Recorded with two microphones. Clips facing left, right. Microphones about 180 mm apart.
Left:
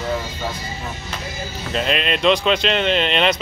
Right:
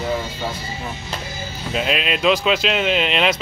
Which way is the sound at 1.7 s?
5° right (ahead or behind).